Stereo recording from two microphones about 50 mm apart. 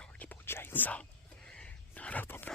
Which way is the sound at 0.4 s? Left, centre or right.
Left.